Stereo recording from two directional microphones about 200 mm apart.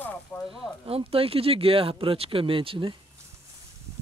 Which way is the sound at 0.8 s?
30° right (ahead or behind).